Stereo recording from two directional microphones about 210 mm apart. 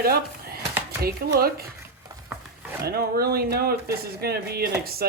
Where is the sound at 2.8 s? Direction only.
50° right (ahead or behind).